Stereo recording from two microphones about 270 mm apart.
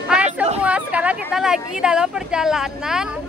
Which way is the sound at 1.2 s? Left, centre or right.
Centre.